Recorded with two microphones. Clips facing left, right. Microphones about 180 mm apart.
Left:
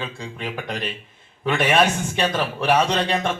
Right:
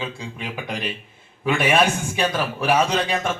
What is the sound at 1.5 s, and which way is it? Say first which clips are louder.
A man's voice: even; 10° right (ahead or behind).